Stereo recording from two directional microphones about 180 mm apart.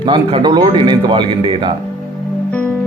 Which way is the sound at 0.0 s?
30° right (ahead or behind).